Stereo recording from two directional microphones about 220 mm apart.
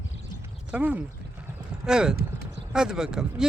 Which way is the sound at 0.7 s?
5° right (ahead or behind).